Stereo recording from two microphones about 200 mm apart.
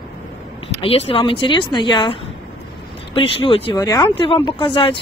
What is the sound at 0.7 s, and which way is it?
A woman's voice, 30° left (ahead or behind).